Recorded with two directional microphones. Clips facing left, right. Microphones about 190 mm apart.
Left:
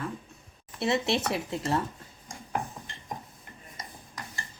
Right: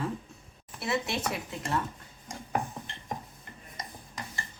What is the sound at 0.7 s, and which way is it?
Speech, 25° left (ahead or behind).